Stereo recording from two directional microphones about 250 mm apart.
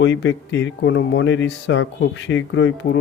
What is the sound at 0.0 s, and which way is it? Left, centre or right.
A man's voice, left.